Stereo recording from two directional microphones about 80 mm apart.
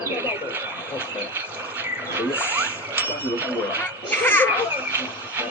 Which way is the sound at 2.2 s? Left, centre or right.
Right.